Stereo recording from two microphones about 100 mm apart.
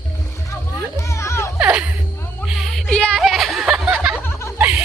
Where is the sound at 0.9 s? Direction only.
30° left (ahead or behind).